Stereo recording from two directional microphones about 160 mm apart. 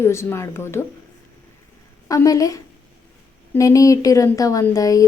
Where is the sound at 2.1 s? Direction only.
20° left (ahead or behind).